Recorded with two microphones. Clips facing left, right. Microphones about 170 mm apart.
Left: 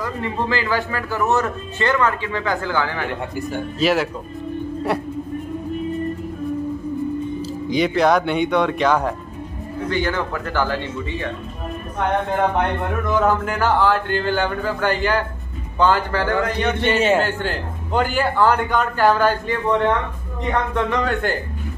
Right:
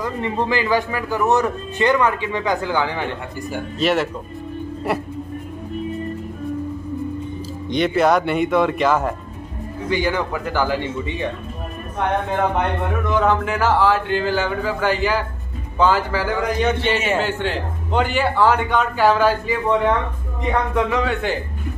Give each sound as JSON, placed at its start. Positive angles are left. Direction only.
{"t": 0.0, "sound": "speech", "side_deg": -20}
{"t": 3.8, "sound": "speech", "side_deg": 0}
{"t": 7.6, "sound": "speech", "side_deg": 0}
{"t": 9.8, "sound": "speech", "side_deg": -10}
{"t": 12.5, "sound": "speech", "side_deg": 0}